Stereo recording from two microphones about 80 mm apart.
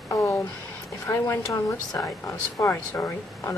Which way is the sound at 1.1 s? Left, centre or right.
Left.